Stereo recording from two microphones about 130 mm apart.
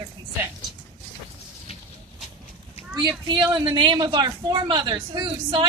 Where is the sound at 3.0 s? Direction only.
35° right (ahead or behind).